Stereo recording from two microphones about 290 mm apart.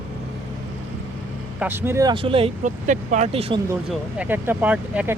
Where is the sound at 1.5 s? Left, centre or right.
Centre.